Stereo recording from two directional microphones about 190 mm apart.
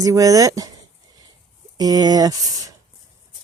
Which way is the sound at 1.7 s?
20° right (ahead or behind).